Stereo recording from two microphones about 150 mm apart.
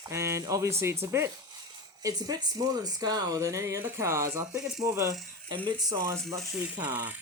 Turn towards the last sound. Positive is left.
turn(degrees=-10)  # may be behind; listen again after turning